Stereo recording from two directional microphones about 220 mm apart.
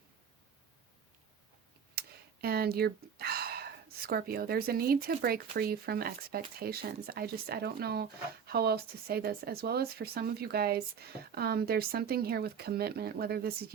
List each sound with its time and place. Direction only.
2.0 s speech: 45° right (ahead or behind)